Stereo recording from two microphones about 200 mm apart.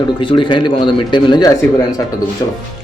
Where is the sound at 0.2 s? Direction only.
25° left (ahead or behind).